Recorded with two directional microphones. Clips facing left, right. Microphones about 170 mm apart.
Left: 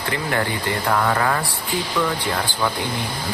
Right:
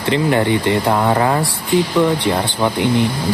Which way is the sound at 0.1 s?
20° right (ahead or behind).